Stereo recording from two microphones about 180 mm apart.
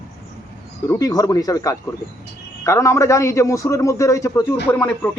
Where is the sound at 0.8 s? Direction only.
20° left (ahead or behind).